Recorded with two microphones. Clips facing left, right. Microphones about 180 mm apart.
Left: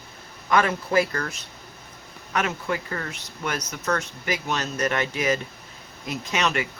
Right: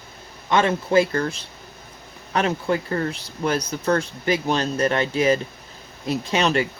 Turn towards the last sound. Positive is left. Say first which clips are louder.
# right 5 dB
turn(degrees=-30)  # may be behind; listen again after turning